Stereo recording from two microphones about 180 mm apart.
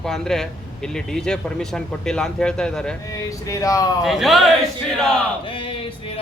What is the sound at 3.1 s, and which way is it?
Speech, 20° left (ahead or behind).